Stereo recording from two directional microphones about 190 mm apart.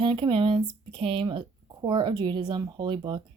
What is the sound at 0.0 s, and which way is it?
Speech, 25° right (ahead or behind).